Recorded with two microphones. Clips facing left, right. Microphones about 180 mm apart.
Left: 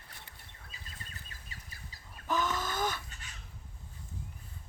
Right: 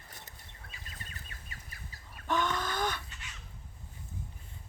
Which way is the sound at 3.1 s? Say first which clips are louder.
Right 1 dB; 40° left (ahead or behind).